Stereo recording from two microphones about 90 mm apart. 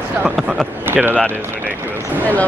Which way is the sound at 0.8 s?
25° right (ahead or behind).